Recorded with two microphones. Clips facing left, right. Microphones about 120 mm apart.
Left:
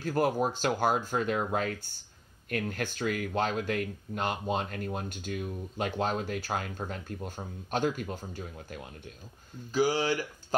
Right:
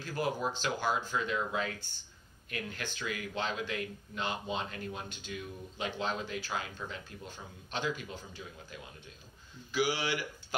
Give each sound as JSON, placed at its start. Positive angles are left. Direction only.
{"t": 0.0, "sound": "speech", "side_deg": 50}
{"t": 9.7, "sound": "speech", "side_deg": 40}